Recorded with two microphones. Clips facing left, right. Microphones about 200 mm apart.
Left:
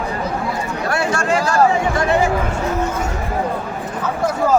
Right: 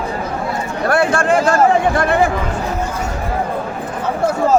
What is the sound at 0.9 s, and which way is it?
Speech, 55° right (ahead or behind).